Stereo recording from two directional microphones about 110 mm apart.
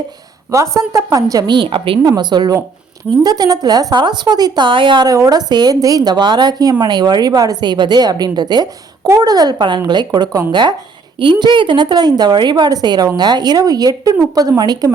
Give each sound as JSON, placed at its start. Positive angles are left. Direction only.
{"t": 0.5, "sound": "a woman's voice", "side_deg": -30}
{"t": 2.0, "sound": "a woman's voice", "side_deg": -40}
{"t": 5.1, "sound": "a woman's voice", "side_deg": -35}